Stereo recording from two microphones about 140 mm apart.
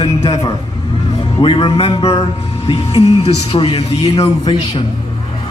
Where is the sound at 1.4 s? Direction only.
40° left (ahead or behind).